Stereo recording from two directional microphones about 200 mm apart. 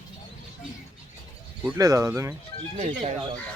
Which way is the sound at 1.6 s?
10° right (ahead or behind).